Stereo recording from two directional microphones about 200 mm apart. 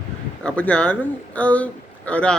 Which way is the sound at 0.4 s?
5° left (ahead or behind).